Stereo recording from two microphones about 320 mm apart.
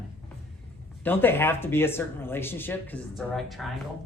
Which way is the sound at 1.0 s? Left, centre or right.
Centre.